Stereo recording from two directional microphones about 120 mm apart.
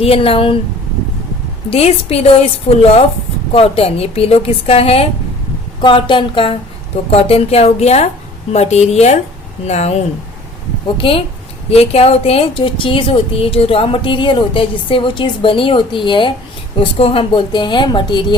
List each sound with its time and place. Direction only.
0.0 s a woman's voice: 50° left (ahead or behind)
1.7 s a woman's voice: 55° left (ahead or behind)
3.5 s a woman's voice: 55° left (ahead or behind)
5.8 s a woman's voice: 45° left (ahead or behind); by 9.9 s 65° left (ahead or behind)
10.9 s a woman's voice: 50° left (ahead or behind)